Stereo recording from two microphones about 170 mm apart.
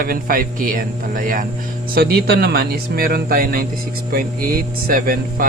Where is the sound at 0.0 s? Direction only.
55° right (ahead or behind).